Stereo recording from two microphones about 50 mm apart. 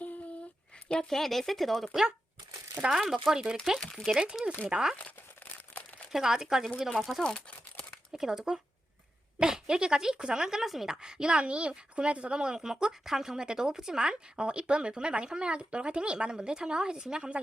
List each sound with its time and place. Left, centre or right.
1.1 s speech: centre; by 4.9 s right
6.1 s speech: centre
6.7 s speech: centre
7.0 s speech: centre
7.3 s crumpling: centre
8.2 s speech: centre